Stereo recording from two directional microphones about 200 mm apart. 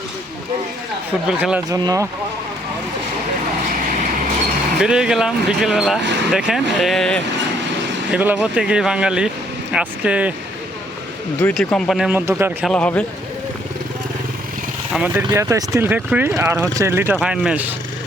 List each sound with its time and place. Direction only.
1.4 s speech: 5° right (ahead or behind)
1.8 s speech: 20° right (ahead or behind)
3.7 s vehicle: 40° right (ahead or behind)
4.8 s speech: 5° right (ahead or behind)
11.3 s a man's voice: 5° left (ahead or behind)
14.9 s speech: 10° right (ahead or behind)